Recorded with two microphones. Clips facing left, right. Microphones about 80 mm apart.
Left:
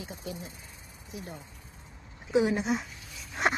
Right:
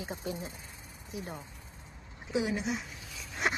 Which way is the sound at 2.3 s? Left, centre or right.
Left.